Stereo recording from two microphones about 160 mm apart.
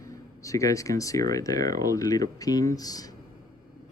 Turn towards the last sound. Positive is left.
turn(degrees=25)  # may be behind; listen again after turning